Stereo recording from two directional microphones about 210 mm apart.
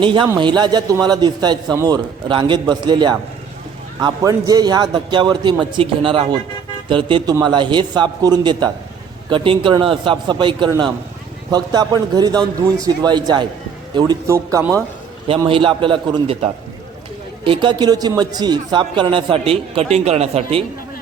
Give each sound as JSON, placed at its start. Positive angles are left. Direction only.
{"t": 0.0, "sound": "a man's voice", "side_deg": -25}
{"t": 15.3, "sound": "a man's voice", "side_deg": -25}